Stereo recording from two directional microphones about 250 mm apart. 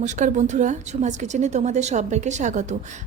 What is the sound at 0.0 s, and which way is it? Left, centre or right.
A woman's voice, right.